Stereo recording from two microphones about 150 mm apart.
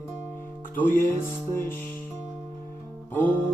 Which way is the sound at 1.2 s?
15° left (ahead or behind).